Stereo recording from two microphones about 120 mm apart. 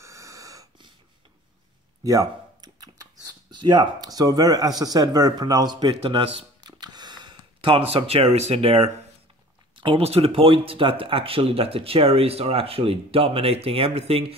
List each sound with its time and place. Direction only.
0.0 s dog: 25° right (ahead or behind)
2.0 s speech: 30° right (ahead or behind); by 14.3 s 55° right (ahead or behind)